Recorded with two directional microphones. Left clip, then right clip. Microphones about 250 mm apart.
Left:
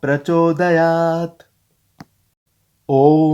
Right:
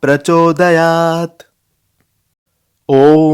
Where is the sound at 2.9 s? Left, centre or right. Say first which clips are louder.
Right 5 dB; right.